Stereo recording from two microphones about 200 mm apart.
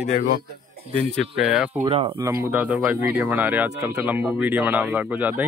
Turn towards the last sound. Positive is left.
turn(degrees=-10)  # may be behind; listen again after turning